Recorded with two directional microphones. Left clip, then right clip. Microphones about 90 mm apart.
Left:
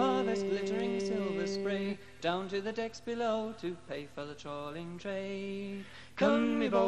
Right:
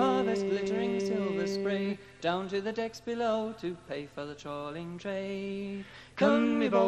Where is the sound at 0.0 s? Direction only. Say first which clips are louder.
Right 3 dB; 30° right (ahead or behind).